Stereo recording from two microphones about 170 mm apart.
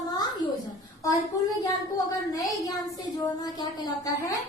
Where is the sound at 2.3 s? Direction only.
20° left (ahead or behind).